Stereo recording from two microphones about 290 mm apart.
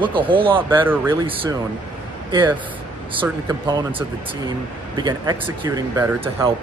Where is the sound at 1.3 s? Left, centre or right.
Centre.